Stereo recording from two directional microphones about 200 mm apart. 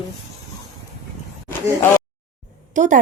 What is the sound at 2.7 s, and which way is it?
Speech, 40° right (ahead or behind).